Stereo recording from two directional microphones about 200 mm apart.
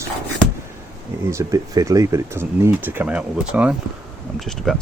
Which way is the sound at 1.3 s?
15° right (ahead or behind).